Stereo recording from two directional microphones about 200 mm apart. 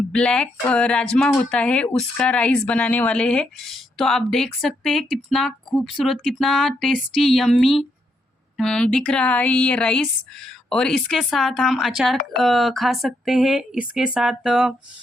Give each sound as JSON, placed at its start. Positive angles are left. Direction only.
{"t": 0.1, "sound": "speech", "side_deg": 5}